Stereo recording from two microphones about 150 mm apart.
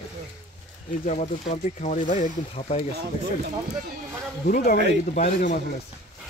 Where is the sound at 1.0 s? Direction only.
50° left (ahead or behind).